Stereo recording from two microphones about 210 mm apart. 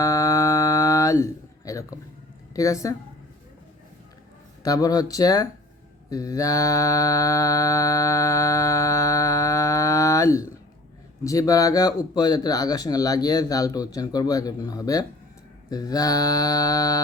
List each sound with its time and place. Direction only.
0.0 s a sound: 15° left (ahead or behind)
2.5 s a woman's voice: 15° left (ahead or behind)
4.6 s speech: 15° left (ahead or behind)
6.1 s mantra: 15° left (ahead or behind)
11.2 s speech: 15° left (ahead or behind)